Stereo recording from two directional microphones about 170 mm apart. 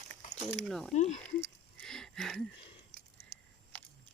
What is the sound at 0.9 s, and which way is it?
Speech, 45° left (ahead or behind).